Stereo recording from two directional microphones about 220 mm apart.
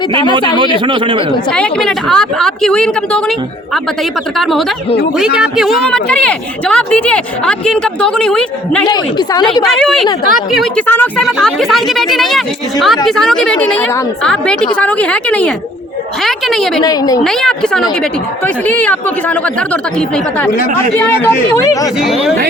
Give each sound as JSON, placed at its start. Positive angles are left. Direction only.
{"t": 0.9, "sound": "speech", "side_deg": -25}
{"t": 1.5, "sound": "speech", "side_deg": 5}
{"t": 5.1, "sound": "speech", "side_deg": -5}
{"t": 8.9, "sound": "a woman's voice", "side_deg": 20}
{"t": 9.6, "sound": "speech", "side_deg": 0}
{"t": 16.8, "sound": "speech", "side_deg": 15}
{"t": 17.2, "sound": "speech", "side_deg": 0}
{"t": 22.0, "sound": "speech", "side_deg": 0}